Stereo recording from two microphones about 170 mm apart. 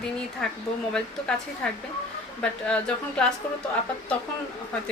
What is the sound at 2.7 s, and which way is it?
Speech, 5° left (ahead or behind).